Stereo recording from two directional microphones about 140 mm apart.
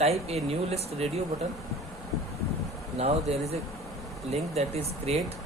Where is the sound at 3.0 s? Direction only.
50° right (ahead or behind).